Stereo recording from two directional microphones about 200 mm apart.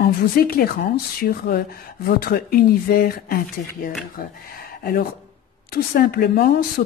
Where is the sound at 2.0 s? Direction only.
50° left (ahead or behind).